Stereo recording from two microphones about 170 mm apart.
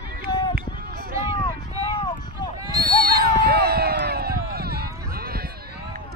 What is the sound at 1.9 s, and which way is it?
Run, 25° left (ahead or behind).